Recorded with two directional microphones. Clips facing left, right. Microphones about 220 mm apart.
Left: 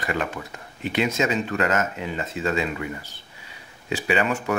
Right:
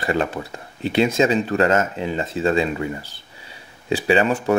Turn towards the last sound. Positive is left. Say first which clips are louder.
# right 5 dB
turn(degrees=-30)  # may be behind; listen again after turning